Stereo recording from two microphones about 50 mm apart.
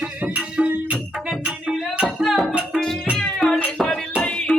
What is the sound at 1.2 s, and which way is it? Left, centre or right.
Music, centre.